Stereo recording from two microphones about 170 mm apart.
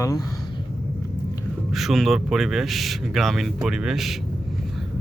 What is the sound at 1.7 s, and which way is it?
Speech, centre (ahead or behind).